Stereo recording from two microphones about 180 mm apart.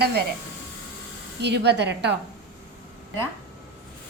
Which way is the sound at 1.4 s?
70° right (ahead or behind).